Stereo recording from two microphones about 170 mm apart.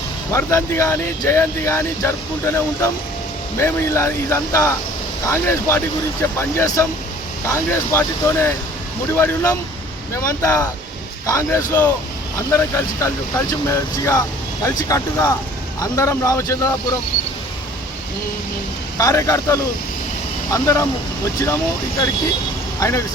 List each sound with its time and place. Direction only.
0.3 s speech: 15° left (ahead or behind)
18.9 s speech: 20° left (ahead or behind)
22.8 s speech: 15° left (ahead or behind)